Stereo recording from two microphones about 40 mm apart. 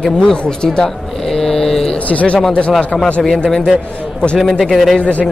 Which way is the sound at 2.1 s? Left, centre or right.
Left.